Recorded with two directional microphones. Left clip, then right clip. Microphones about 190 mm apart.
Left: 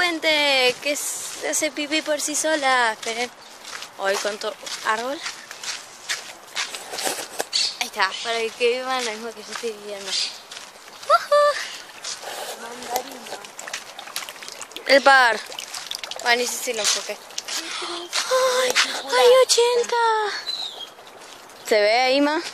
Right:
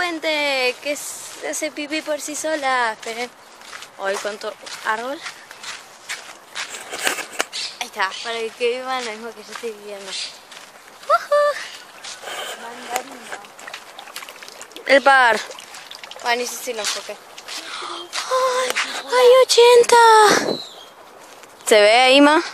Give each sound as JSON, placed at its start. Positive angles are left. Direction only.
{"t": 0.0, "sound": "speech", "side_deg": 0}
{"t": 3.7, "sound": "a sound", "side_deg": 5}
{"t": 7.8, "sound": "speech", "side_deg": -5}
{"t": 11.1, "sound": "a sound", "side_deg": -5}
{"t": 14.9, "sound": "speech", "side_deg": -5}
{"t": 15.5, "sound": "pour", "side_deg": 45}
{"t": 16.3, "sound": "speech", "side_deg": -5}
{"t": 18.9, "sound": "speech", "side_deg": -20}
{"t": 21.6, "sound": "speech", "side_deg": -15}